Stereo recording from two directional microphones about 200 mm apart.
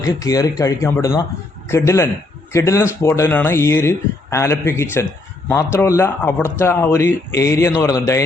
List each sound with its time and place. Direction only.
0.0 s speech: 15° left (ahead or behind)